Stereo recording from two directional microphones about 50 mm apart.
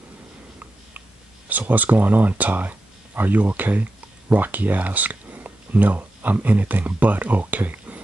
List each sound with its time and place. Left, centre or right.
1.5 s speech: right